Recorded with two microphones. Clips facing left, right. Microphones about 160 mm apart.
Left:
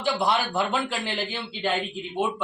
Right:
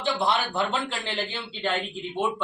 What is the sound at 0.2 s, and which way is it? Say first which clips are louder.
Speech: left 1 dB; 15° left (ahead or behind).